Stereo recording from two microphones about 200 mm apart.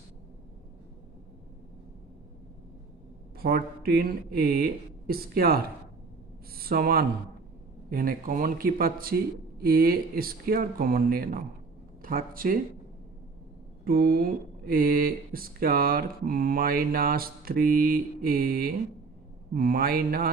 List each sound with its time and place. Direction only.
3.3 s speech: 50° right (ahead or behind)
13.8 s speech: 45° right (ahead or behind)